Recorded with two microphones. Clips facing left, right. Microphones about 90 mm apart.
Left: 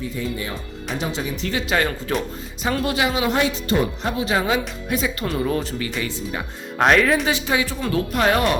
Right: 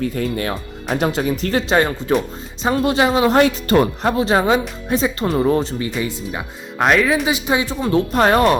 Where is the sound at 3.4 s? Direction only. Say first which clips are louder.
Right 6 dB; 55° right (ahead or behind); by 5.9 s 30° right (ahead or behind).